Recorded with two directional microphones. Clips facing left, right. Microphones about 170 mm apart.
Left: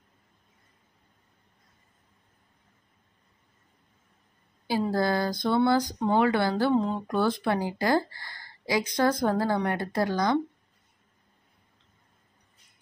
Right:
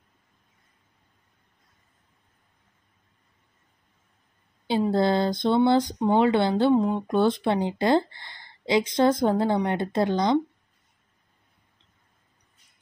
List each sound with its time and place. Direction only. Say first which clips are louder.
4.6 s speech: right 4 dB; 25° right (ahead or behind)